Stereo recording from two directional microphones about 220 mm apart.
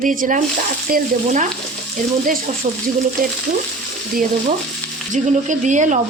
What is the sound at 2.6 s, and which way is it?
Speech, 35° right (ahead or behind).